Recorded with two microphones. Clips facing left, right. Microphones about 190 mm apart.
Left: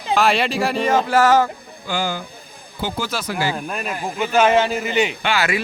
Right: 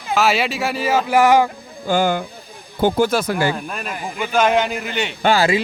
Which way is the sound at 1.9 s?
55° right (ahead or behind).